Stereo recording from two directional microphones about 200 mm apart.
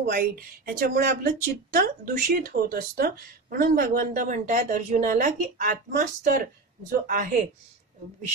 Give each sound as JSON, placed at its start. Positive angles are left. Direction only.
{"t": 0.1, "sound": "speech", "side_deg": -45}